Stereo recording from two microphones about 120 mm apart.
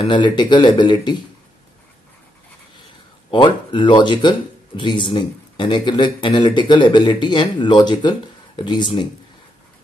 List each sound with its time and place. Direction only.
0.0 s speech: 40° left (ahead or behind)
3.3 s speech: 45° left (ahead or behind)